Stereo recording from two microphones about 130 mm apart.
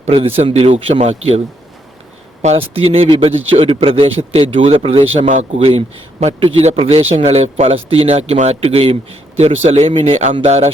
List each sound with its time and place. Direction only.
0.0 s a man's voice: 45° right (ahead or behind)
2.4 s a man's voice: 50° right (ahead or behind)